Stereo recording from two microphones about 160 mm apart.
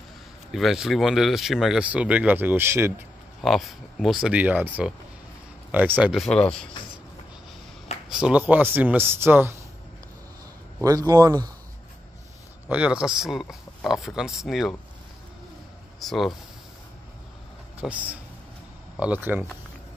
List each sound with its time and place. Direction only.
0.5 s speech: centre (ahead or behind)
3.4 s speech: centre (ahead or behind)
6.2 s speech: 5° left (ahead or behind)
8.1 s speech: 5° right (ahead or behind)
10.8 s a man's voice: 20° right (ahead or behind)
12.6 s speech: 5° right (ahead or behind)
16.0 s speech: centre (ahead or behind)
17.7 s speech: 10° right (ahead or behind)